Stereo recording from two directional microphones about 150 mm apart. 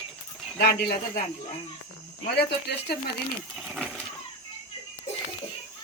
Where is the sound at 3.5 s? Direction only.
Centre (ahead or behind).